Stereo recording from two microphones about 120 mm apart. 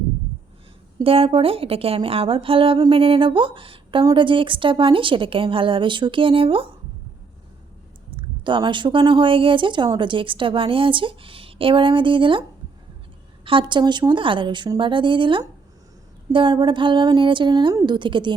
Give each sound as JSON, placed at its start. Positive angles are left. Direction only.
{"t": 1.0, "sound": "speech", "side_deg": -50}
{"t": 8.1, "sound": "a woman's voice", "side_deg": -40}